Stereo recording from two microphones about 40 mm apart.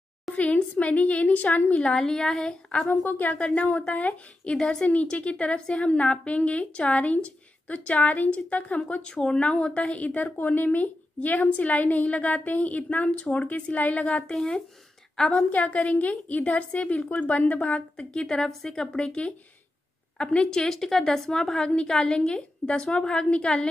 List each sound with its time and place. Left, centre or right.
0.4 s a woman's voice: left
1.8 s a woman's voice: left
2.9 s a woman's voice: left
3.3 s a woman's voice: left
4.5 s a woman's voice: centre; by 8.7 s left
8.7 s a woman's voice: left
14.2 s a woman's voice: centre
15.5 s a woman's voice: left
17.9 s a woman's voice: centre
20.2 s a woman's voice: left